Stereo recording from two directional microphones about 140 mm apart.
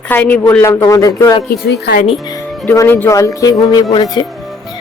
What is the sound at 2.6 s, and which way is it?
Music, 15° left (ahead or behind).